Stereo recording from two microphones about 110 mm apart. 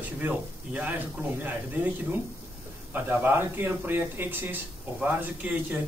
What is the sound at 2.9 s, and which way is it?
Speech, 20° right (ahead or behind).